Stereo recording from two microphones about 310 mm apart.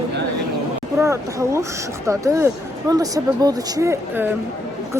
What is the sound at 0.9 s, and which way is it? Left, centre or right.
Speech, centre.